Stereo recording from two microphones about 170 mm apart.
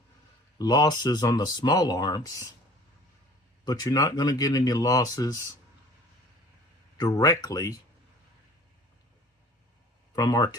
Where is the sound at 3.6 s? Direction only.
25° left (ahead or behind).